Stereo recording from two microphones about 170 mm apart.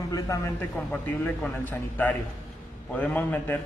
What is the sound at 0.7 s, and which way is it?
A man's voice, 10° left (ahead or behind).